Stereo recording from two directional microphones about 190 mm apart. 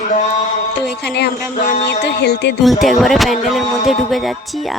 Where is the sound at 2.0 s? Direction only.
60° left (ahead or behind).